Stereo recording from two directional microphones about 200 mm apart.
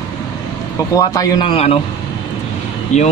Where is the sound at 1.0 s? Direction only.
20° left (ahead or behind).